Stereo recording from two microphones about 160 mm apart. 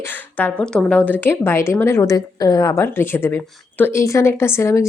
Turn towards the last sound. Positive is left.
turn(degrees=15)  # may be behind; listen again after turning